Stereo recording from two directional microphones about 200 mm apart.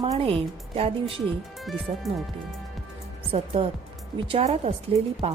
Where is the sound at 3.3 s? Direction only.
30° right (ahead or behind).